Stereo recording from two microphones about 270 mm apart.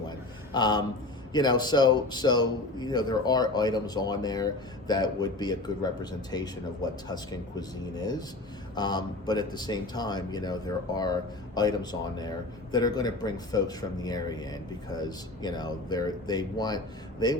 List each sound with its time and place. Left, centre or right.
0.5 s a man's voice: centre
8.7 s a man's voice: centre